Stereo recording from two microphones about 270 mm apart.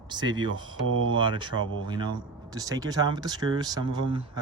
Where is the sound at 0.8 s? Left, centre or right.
Right.